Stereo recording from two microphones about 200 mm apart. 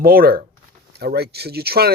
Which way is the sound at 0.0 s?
50° right (ahead or behind).